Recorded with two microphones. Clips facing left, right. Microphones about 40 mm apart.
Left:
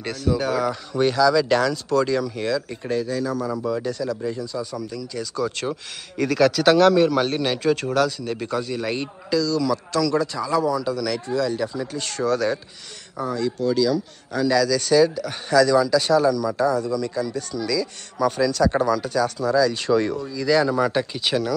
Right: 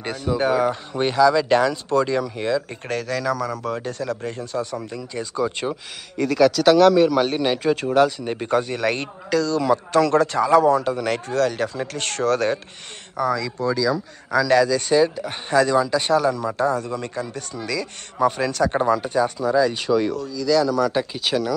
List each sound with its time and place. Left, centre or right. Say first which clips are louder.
0.0 s speech: right 1 dB; right
2.2 s speech: right 1 dB; centre
2.9 s speech: even; right
3.7 s a man's voice: left 1 dB; right
5.7 s a man's voice: even; centre
8.0 s speech: right 3 dB; right
8.5 s speech: right 6 dB; right
10.1 s speech: right 6 dB; right
12.0 s speech: right 2 dB; right
13.2 s speech: right 5 dB; right
14.7 s a man's voice: left 1 dB; right
19.7 s speech: even; centre
20.2 s speech: even; centre
20.9 s a man's voice: even; centre